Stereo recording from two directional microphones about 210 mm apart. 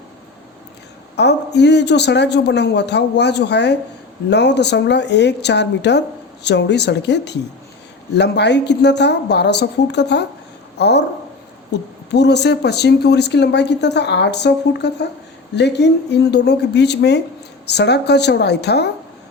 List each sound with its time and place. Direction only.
1.1 s a woman's voice: 55° left (ahead or behind)
12.1 s speech: 55° left (ahead or behind)